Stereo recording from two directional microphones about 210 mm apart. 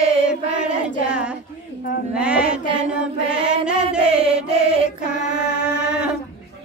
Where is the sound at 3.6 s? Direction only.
5° right (ahead or behind).